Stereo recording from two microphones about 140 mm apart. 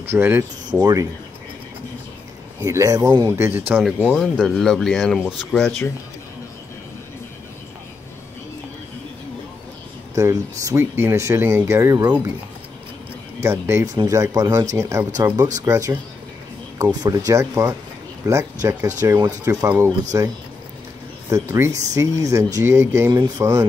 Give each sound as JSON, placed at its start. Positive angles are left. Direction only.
{"t": 0.0, "sound": "speech", "side_deg": -15}
{"t": 2.6, "sound": "speech", "side_deg": -20}
{"t": 3.8, "sound": "speech", "side_deg": 0}
{"t": 10.1, "sound": "speech", "side_deg": -20}
{"t": 13.4, "sound": "speech", "side_deg": -20}
{"t": 21.3, "sound": "speech", "side_deg": -20}